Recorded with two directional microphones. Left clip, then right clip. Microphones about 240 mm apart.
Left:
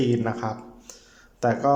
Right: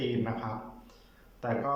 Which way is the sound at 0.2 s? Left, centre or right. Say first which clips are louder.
Left 6 dB; left.